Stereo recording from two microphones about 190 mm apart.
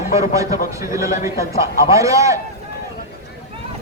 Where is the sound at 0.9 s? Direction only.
15° right (ahead or behind).